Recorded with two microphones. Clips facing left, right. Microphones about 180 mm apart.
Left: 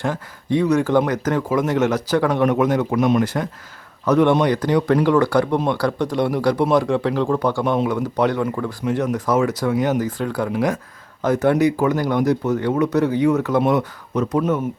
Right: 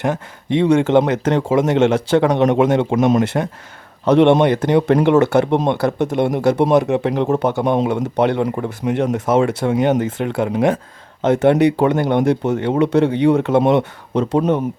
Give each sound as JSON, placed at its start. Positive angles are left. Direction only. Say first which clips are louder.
{"t": 0.0, "sound": "a man's voice", "louder": "right 4 dB", "side_deg": -20}